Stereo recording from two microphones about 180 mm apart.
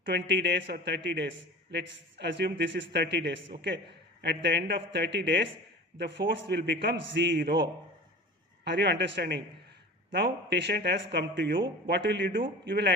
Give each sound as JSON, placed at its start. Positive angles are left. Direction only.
{"t": 0.1, "sound": "a man's voice", "side_deg": -75}
{"t": 12.6, "sound": "a man's voice", "side_deg": -70}